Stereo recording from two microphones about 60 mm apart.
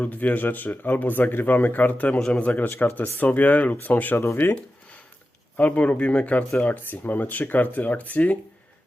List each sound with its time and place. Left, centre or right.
0.0 s speech: left
2.1 s speech: centre
2.7 s speech: left